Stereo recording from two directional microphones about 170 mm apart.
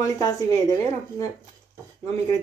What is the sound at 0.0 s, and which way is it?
Speech, 20° left (ahead or behind).